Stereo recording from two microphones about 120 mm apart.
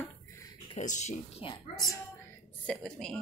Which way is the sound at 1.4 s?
50° left (ahead or behind).